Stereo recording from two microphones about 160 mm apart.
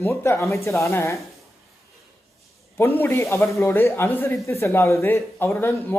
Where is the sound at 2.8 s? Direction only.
15° left (ahead or behind).